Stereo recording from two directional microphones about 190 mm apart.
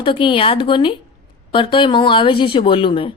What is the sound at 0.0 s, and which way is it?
A woman's voice, 25° left (ahead or behind).